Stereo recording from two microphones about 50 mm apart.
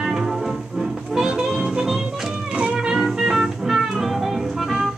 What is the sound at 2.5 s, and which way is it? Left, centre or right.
Music, centre.